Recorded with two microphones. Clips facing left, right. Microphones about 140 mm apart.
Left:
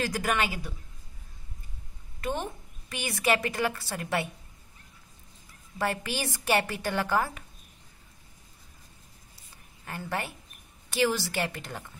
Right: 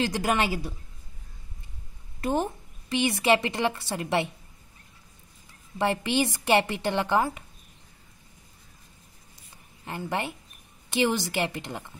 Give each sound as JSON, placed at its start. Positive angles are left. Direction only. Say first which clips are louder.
{"t": 0.0, "sound": "a woman's voice", "louder": "right 3 dB", "side_deg": -25}
{"t": 2.2, "sound": "a woman's voice", "louder": "right 6 dB", "side_deg": -35}
{"t": 5.8, "sound": "a woman's voice", "louder": "right 6 dB", "side_deg": -25}
{"t": 9.8, "sound": "a woman's voice", "louder": "right 3 dB", "side_deg": -20}